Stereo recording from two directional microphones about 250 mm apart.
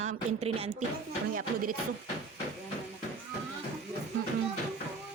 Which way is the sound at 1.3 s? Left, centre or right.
Right.